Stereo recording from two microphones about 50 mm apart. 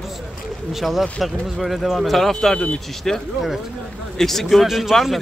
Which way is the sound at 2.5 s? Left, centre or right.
Left.